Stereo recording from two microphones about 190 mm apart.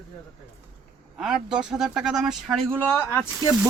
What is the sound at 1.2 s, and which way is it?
Speech, 5° right (ahead or behind).